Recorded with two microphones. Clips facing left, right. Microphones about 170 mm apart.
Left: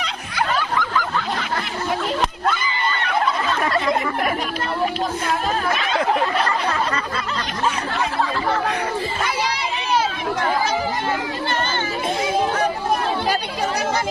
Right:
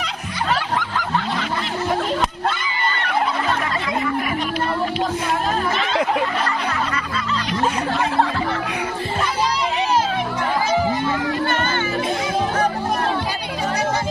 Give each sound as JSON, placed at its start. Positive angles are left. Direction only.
{"t": 0.5, "sound": "snicker", "side_deg": -70}